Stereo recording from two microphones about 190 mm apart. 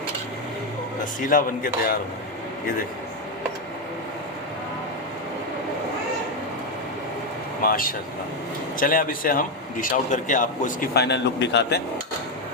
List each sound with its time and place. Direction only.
1.3 s speech: 50° left (ahead or behind)
7.6 s speech: 50° left (ahead or behind); by 11.8 s 65° left (ahead or behind)